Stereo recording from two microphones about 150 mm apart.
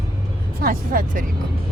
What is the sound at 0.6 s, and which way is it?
Speech, 70° right (ahead or behind).